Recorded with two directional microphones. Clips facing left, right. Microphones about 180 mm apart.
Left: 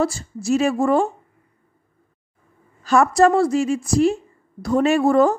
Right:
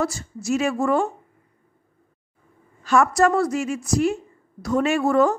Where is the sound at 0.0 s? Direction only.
30° left (ahead or behind).